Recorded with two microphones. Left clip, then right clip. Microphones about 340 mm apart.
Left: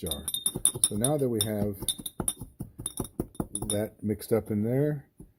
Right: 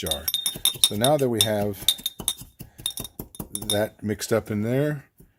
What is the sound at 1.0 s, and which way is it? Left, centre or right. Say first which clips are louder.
Speech: right 6 dB; right.